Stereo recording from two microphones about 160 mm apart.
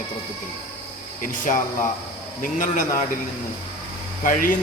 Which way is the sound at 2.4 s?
55° left (ahead or behind).